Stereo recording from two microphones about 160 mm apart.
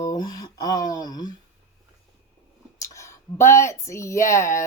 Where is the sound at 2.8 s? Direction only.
20° left (ahead or behind).